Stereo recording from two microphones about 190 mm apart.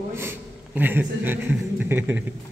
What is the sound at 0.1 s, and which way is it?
A man's voice, 10° right (ahead or behind).